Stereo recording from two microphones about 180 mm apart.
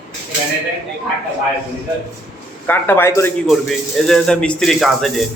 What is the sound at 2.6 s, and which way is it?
Speech, 10° left (ahead or behind).